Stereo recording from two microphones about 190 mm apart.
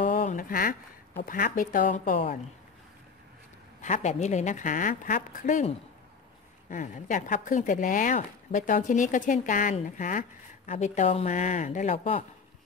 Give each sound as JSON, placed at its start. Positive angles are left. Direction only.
{"t": 0.0, "sound": "speech", "side_deg": 45}
{"t": 3.8, "sound": "a woman's voice", "side_deg": 40}